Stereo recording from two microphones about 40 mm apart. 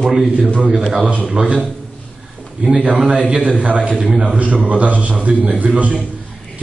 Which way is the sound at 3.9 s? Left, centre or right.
Right.